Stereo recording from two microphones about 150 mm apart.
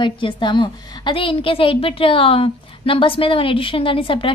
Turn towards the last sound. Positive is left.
turn(degrees=35)  # may be behind; listen again after turning